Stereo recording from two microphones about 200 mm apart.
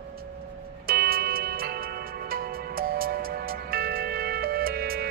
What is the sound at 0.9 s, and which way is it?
Music, 50° right (ahead or behind).